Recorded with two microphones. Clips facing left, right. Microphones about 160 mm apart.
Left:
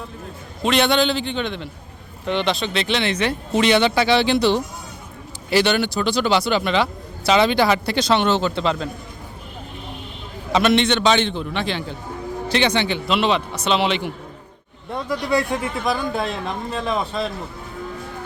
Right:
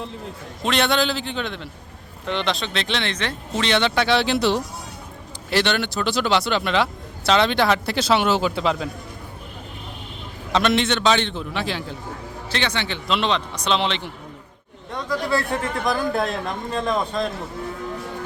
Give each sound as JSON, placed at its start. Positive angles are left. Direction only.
{"t": 0.6, "sound": "a man's voice", "side_deg": 0}
{"t": 10.5, "sound": "a man's voice", "side_deg": 0}
{"t": 12.5, "sound": "a man's voice", "side_deg": 15}
{"t": 13.1, "sound": "a man's voice", "side_deg": 5}
{"t": 15.3, "sound": "a man's voice", "side_deg": 15}